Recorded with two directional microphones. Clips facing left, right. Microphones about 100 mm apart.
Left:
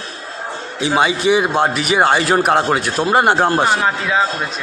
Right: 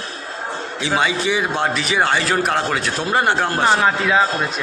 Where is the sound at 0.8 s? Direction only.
15° left (ahead or behind).